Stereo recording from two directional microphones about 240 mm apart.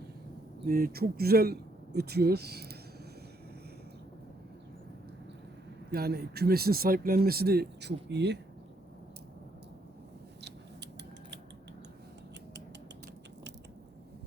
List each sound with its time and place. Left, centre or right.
0.6 s speech: right
5.9 s speech: right